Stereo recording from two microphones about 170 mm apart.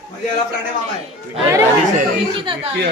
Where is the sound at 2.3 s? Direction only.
30° right (ahead or behind).